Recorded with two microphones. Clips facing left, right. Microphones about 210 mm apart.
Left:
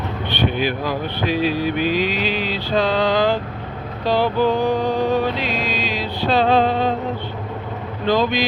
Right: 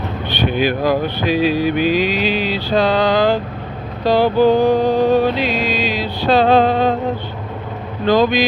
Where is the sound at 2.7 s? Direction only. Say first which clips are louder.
Right 3 dB; 40° right (ahead or behind).